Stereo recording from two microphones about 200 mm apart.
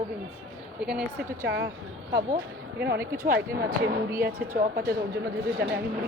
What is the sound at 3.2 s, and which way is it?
Speech, 45° right (ahead or behind).